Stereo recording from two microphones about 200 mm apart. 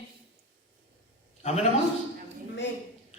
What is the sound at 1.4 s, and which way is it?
Speech, 30° left (ahead or behind).